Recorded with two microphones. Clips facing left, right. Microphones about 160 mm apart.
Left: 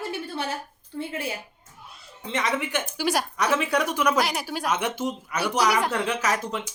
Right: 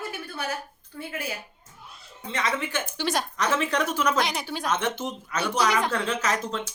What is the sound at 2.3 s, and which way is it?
A woman's voice, 15° left (ahead or behind).